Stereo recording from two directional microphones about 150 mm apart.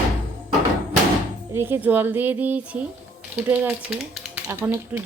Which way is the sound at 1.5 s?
15° right (ahead or behind).